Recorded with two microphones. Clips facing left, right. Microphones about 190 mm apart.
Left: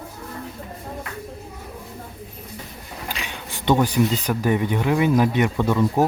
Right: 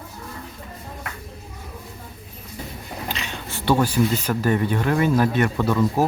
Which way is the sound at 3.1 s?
10° left (ahead or behind).